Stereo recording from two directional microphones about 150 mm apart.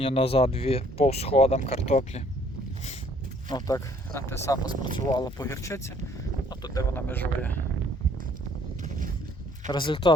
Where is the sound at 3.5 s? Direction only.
20° left (ahead or behind).